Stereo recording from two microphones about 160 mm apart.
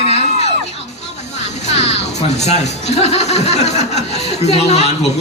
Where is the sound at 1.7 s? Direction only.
40° left (ahead or behind).